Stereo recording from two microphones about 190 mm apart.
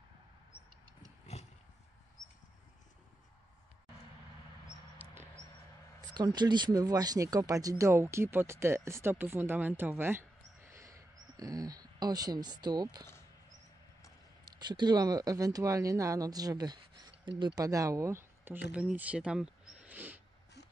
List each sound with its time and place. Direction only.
4.9 s a sound: 10° right (ahead or behind)
5.9 s speech: 20° right (ahead or behind)
14.4 s speech: 20° right (ahead or behind)